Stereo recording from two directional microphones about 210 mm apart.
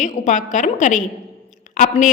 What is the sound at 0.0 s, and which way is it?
A woman's voice, 35° left (ahead or behind).